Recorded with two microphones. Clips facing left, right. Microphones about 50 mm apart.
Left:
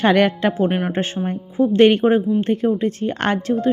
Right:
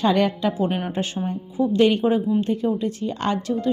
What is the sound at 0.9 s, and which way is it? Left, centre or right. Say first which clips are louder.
Speech: left 3 dB; left.